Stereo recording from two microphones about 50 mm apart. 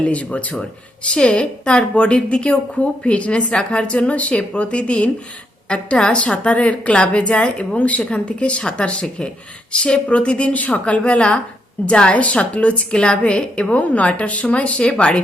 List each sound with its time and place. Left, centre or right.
0.0 s a woman's voice: left